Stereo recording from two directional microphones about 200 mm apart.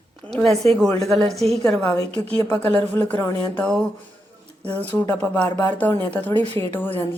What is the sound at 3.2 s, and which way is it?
A woman's voice, 5° left (ahead or behind).